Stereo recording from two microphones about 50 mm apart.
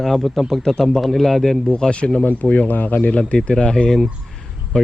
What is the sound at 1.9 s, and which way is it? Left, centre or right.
Speech, left.